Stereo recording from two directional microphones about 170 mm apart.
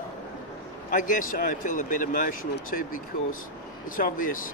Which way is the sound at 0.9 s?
50° left (ahead or behind).